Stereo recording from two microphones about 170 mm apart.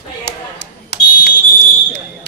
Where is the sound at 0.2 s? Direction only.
70° left (ahead or behind).